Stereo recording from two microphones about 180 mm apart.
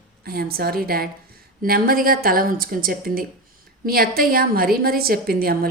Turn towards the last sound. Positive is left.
turn(degrees=-55)  # may be behind; listen again after turning